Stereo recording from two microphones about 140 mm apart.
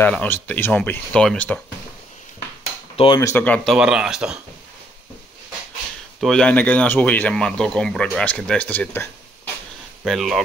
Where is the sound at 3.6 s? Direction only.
5° right (ahead or behind).